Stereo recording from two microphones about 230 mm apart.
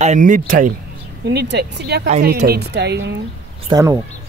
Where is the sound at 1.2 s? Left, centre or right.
Right.